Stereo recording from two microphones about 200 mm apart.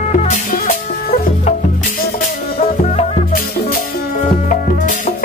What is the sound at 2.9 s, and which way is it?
Music, 35° left (ahead or behind).